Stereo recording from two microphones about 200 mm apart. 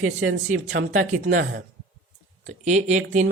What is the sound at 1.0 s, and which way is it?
Speech, 40° right (ahead or behind).